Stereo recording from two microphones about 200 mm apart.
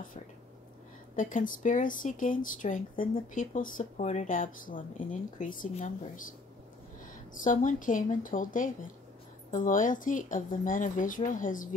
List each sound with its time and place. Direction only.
1.1 s speech: 40° left (ahead or behind)
7.3 s speech: 40° left (ahead or behind)